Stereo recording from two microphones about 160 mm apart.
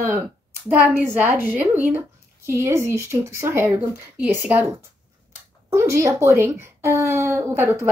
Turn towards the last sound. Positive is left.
turn(degrees=-15)  # may be behind; listen again after turning